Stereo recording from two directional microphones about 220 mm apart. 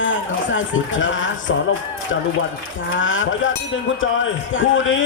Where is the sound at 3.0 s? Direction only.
60° left (ahead or behind).